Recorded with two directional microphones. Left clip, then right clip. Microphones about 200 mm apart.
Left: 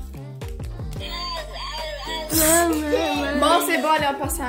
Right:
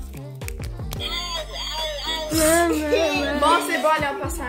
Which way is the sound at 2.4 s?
20° right (ahead or behind).